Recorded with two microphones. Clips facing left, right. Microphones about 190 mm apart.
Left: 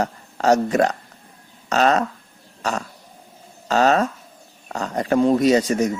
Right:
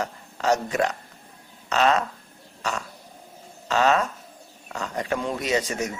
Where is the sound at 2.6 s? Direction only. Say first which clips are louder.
Left 5 dB; 40° left (ahead or behind).